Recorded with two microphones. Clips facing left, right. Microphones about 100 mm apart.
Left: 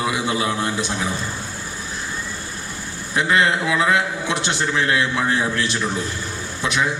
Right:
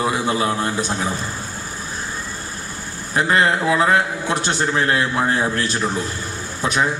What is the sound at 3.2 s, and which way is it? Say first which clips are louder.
A man's voice: right 1 dB; 40° right (ahead or behind).